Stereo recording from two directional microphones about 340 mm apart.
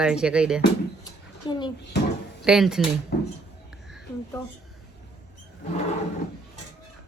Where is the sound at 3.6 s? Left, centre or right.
Centre.